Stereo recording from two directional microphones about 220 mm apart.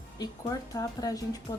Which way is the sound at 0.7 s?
15° left (ahead or behind).